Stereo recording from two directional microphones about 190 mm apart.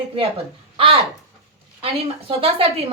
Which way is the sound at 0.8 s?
30° right (ahead or behind).